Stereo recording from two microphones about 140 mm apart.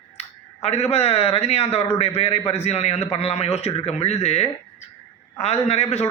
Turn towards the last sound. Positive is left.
turn(degrees=50)  # may be behind; listen again after turning